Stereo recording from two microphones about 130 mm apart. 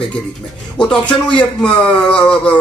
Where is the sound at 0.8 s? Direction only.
10° left (ahead or behind).